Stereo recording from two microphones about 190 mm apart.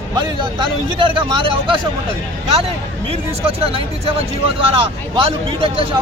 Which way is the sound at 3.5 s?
30° right (ahead or behind).